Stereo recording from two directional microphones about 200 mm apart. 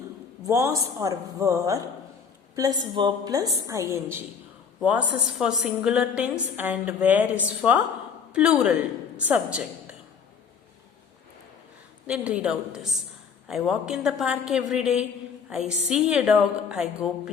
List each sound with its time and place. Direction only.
0.4 s a woman's voice: 15° right (ahead or behind)
12.0 s a woman's voice: 5° right (ahead or behind)